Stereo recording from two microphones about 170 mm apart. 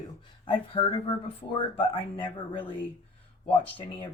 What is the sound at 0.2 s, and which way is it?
Speech, 30° left (ahead or behind).